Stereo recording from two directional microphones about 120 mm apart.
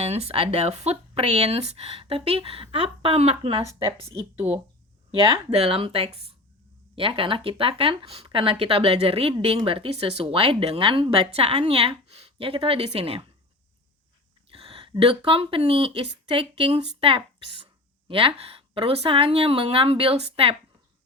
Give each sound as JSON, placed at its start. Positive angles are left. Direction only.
{"t": 0.0, "sound": "speech", "side_deg": -60}
{"t": 3.7, "sound": "speech", "side_deg": 30}
{"t": 5.5, "sound": "speech", "side_deg": -55}
{"t": 14.5, "sound": "speech", "side_deg": -50}